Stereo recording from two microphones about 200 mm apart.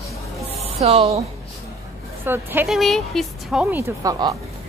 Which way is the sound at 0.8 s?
30° right (ahead or behind).